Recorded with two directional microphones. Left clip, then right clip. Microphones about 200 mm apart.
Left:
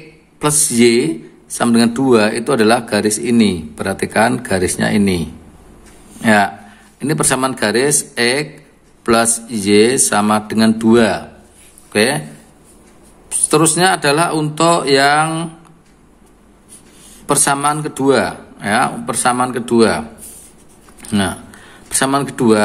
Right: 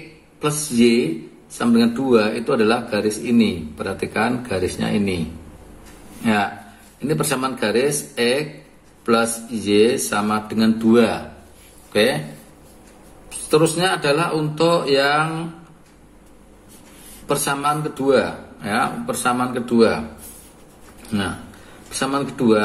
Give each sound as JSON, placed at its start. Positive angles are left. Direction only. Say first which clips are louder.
{"t": 0.4, "sound": "speech", "louder": "left 5 dB", "side_deg": 45}
{"t": 6.2, "sound": "a man's voice", "louder": "left 8 dB", "side_deg": 40}
{"t": 13.3, "sound": "speech", "louder": "left 3 dB", "side_deg": 45}
{"t": 17.3, "sound": "speech", "louder": "left 5 dB", "side_deg": 45}
{"t": 21.1, "sound": "speech", "louder": "left 6 dB", "side_deg": 45}